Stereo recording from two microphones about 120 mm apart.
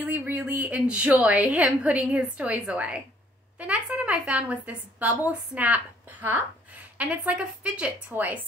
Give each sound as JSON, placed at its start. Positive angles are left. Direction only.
{"t": 0.0, "sound": "a woman's voice", "side_deg": -15}